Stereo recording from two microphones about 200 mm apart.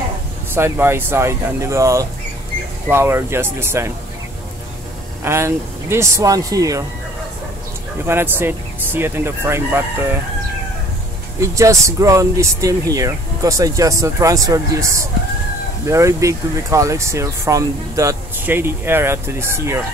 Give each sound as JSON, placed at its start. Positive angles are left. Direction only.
{"t": 0.6, "sound": "speech", "side_deg": -10}
{"t": 5.2, "sound": "speech", "side_deg": -15}
{"t": 8.0, "sound": "speech", "side_deg": -10}
{"t": 11.4, "sound": "speech", "side_deg": -15}